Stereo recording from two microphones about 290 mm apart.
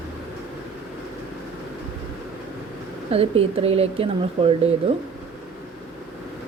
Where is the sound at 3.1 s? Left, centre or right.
Centre.